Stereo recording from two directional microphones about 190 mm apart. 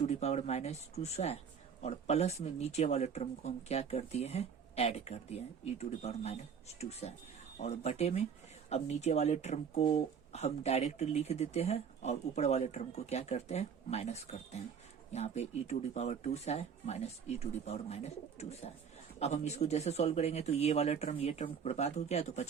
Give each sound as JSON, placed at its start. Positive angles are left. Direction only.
{"t": 0.0, "sound": "speech", "side_deg": 35}